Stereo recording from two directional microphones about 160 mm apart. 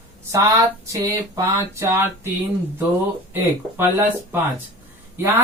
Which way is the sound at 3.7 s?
15° right (ahead or behind).